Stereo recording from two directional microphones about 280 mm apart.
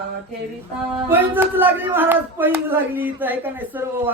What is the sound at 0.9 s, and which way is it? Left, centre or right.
Speech, centre.